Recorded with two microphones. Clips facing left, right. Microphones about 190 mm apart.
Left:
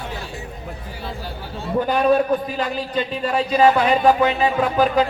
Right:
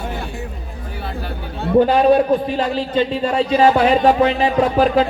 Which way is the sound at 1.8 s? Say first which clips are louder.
Right 3 dB; 30° right (ahead or behind).